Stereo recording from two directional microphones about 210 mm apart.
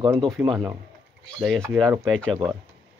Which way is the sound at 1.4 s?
Centre (ahead or behind).